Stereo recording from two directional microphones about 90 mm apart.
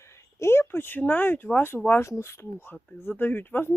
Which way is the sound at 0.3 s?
30° left (ahead or behind).